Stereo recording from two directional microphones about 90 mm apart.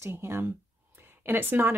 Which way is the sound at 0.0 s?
25° right (ahead or behind).